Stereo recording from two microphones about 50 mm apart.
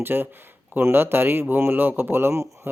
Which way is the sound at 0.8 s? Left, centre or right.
Right.